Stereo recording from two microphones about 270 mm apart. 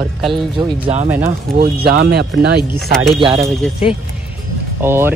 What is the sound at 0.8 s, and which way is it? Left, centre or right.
Speech, right.